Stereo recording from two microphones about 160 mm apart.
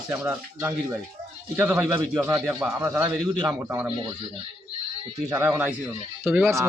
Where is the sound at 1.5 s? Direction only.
10° right (ahead or behind).